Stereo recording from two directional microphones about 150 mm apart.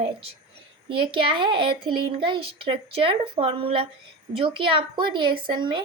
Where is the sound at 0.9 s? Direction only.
35° right (ahead or behind).